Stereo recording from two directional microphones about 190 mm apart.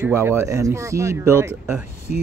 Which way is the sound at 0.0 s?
15° right (ahead or behind).